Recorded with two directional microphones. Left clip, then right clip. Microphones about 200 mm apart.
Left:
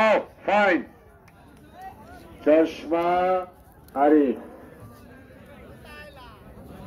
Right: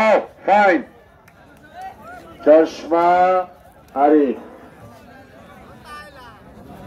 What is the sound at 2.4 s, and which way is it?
Speech, 25° right (ahead or behind).